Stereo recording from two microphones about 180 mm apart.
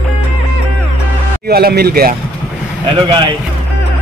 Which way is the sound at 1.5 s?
60° right (ahead or behind).